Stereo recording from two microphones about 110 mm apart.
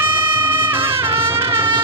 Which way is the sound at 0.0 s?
20° right (ahead or behind).